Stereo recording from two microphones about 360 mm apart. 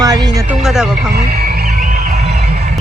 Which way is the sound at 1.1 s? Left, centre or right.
Right.